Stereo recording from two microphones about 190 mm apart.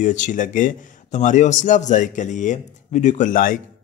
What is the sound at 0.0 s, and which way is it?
A man's voice, 40° left (ahead or behind).